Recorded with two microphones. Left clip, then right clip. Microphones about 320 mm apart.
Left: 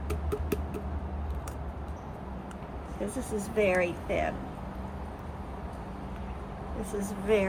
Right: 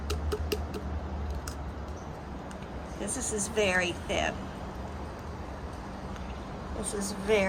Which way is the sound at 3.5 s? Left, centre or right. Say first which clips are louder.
Left 1 dB; centre.